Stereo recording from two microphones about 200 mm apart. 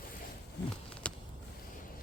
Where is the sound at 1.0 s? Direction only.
5° left (ahead or behind).